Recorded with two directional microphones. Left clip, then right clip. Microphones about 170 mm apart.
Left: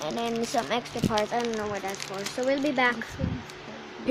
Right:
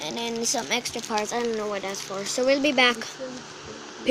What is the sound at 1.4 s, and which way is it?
Speech, 35° right (ahead or behind).